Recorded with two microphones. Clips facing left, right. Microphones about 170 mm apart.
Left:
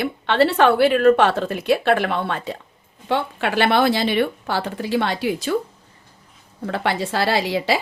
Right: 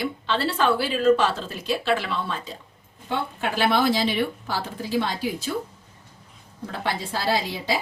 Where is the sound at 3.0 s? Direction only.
85° left.